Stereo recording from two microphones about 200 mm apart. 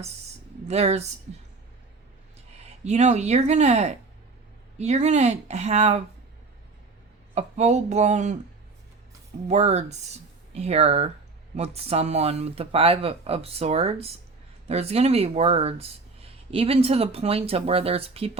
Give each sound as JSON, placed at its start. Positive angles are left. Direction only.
{"t": 0.7, "sound": "speech", "side_deg": -35}
{"t": 2.6, "sound": "speech", "side_deg": -35}
{"t": 7.3, "sound": "speech", "side_deg": -35}
{"t": 9.5, "sound": "speech", "side_deg": -35}